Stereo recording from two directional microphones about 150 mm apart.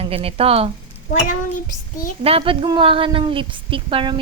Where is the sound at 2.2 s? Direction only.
40° right (ahead or behind).